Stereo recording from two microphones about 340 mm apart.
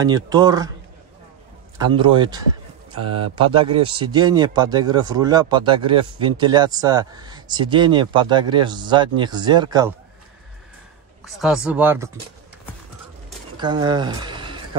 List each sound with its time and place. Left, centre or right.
0.0 s speech: centre
1.8 s speech: centre
3.0 s speech: right
3.9 s speech: centre
11.2 s speech: centre
13.6 s speech: centre